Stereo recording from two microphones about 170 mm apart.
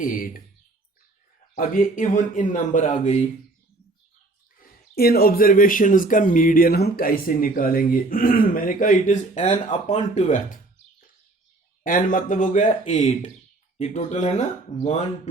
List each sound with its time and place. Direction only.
0.0 s speech: 55° left (ahead or behind)
1.5 s speech: 55° left (ahead or behind)
4.5 s speech: 60° left (ahead or behind)
11.8 s speech: 50° left (ahead or behind)